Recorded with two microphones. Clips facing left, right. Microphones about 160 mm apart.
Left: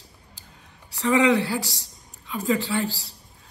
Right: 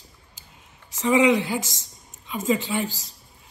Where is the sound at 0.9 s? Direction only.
15° right (ahead or behind).